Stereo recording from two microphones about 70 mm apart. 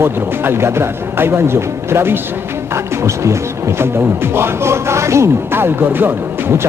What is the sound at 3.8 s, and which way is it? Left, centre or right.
Speech, right.